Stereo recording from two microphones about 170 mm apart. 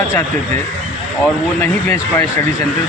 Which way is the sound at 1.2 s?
15° left (ahead or behind).